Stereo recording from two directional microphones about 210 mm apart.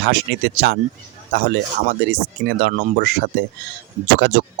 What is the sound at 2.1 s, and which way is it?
Speech, 50° right (ahead or behind).